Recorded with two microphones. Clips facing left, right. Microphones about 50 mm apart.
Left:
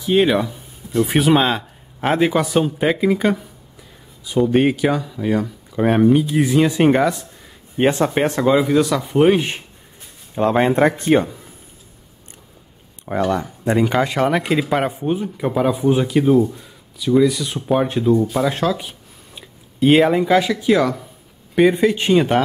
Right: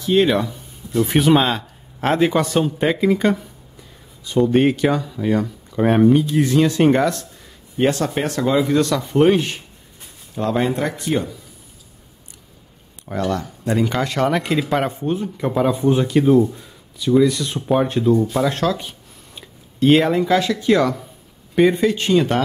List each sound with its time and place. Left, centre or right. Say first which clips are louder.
0.0 s speech: even; centre
7.7 s speech: left 2 dB; left
8.5 s speech: left 1 dB; centre
10.3 s speech: left 4 dB; left
13.0 s speech: left 3 dB; centre